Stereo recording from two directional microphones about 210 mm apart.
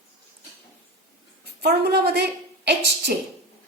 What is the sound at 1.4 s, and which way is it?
A woman's voice, 50° right (ahead or behind).